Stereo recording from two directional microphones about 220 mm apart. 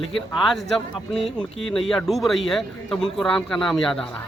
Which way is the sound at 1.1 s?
Centre (ahead or behind).